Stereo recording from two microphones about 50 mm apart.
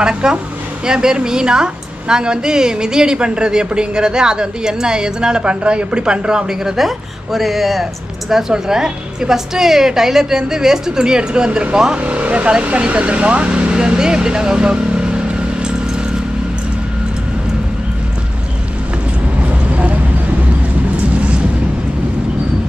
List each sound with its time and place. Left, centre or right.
0.0 s a woman's voice: centre
19.7 s vehicle: right